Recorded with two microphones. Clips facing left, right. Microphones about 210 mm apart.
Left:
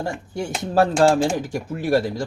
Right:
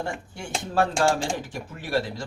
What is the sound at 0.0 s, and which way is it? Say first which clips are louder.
A man's voice: left 6 dB; 40° left (ahead or behind).